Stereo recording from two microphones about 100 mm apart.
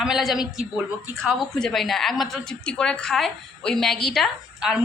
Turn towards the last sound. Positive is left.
turn(degrees=0)  # may be behind; listen again after turning